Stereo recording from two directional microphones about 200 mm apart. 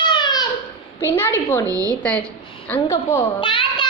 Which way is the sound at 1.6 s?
15° right (ahead or behind).